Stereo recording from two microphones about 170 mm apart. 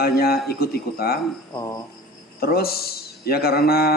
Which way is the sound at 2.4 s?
65° left (ahead or behind).